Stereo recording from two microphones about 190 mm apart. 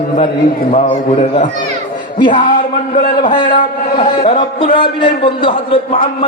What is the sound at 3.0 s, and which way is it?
Mantra, 50° left (ahead or behind).